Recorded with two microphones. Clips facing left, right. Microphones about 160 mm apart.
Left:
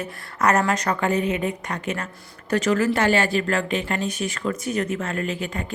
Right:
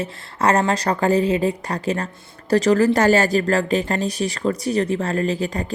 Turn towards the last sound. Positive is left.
turn(degrees=-35)  # may be behind; listen again after turning